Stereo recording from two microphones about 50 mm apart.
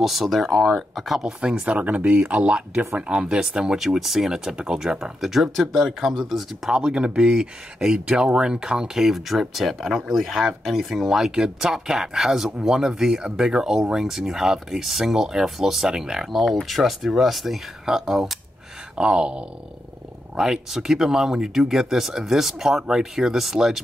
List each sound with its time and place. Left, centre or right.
0.0 s speech: centre
1.4 s speech: right; by 4.4 s centre
4.5 s speech: centre
6.7 s speech: centre
18.9 s speech: centre